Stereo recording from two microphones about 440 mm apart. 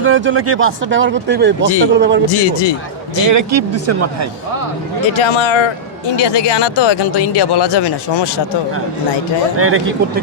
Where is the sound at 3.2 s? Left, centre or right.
Right.